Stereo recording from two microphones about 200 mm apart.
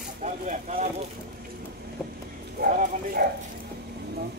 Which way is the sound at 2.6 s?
45° right (ahead or behind).